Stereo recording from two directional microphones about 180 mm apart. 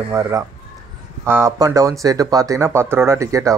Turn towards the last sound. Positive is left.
turn(degrees=-15)  # may be behind; listen again after turning